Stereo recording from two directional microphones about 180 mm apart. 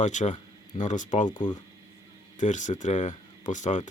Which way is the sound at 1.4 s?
25° left (ahead or behind).